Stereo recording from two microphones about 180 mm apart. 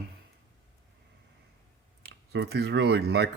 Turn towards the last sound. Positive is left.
turn(degrees=-65)  # may be behind; listen again after turning